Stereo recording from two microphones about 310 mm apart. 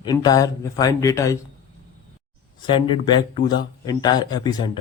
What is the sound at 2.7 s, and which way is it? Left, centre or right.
Speech, centre.